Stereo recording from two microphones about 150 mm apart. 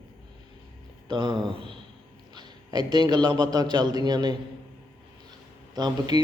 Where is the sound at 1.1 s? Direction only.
30° right (ahead or behind).